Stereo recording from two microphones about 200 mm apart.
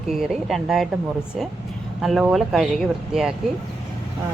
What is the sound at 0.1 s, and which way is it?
Speech, centre (ahead or behind).